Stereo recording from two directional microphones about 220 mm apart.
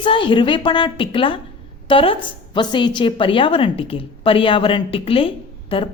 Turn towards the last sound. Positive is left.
turn(degrees=25)  # may be behind; listen again after turning